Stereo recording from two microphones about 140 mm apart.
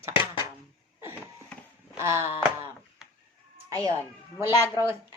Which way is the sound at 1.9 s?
20° right (ahead or behind).